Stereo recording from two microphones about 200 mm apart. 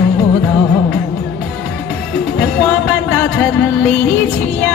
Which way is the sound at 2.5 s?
Centre (ahead or behind).